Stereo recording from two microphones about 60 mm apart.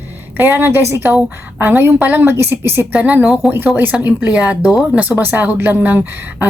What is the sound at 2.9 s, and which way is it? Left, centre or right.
Speech, right.